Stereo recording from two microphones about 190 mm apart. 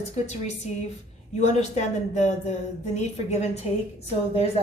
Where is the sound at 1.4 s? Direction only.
35° left (ahead or behind).